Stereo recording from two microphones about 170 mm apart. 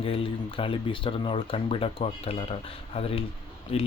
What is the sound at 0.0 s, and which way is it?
Speech, 35° left (ahead or behind).